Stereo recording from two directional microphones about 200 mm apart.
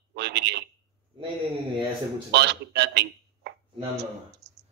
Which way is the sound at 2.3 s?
60° right (ahead or behind).